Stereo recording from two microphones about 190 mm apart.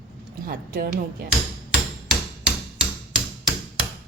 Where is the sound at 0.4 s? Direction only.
50° right (ahead or behind).